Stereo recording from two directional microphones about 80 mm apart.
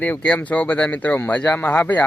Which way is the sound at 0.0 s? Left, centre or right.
Centre.